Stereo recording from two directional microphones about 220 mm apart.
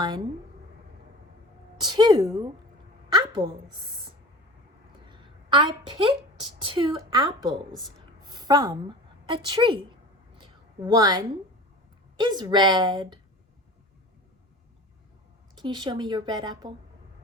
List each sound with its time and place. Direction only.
0.0 s a woman's voice: 20° right (ahead or behind)
1.8 s a woman's voice: 20° right (ahead or behind)
5.0 s a sound: 20° right (ahead or behind)
6.6 s a woman's voice: 25° right (ahead or behind)
7.5 s a woman's voice: centre (ahead or behind)
8.2 s a woman's voice: 20° right (ahead or behind)
10.3 s a sound: 20° right (ahead or behind)
12.1 s a woman's voice: 20° right (ahead or behind)
15.5 s a woman's voice: 20° right (ahead or behind)